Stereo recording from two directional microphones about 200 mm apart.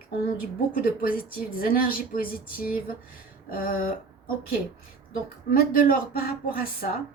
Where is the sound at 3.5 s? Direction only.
45° left (ahead or behind).